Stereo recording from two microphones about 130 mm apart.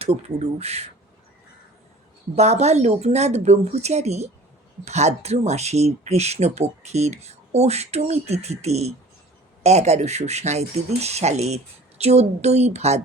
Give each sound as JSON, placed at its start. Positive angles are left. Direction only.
{"t": 0.0, "sound": "speech", "side_deg": -55}
{"t": 2.3, "sound": "speech", "side_deg": -55}